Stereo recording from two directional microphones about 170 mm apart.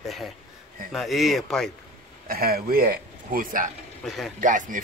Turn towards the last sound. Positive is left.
turn(degrees=-50)  # may be behind; listen again after turning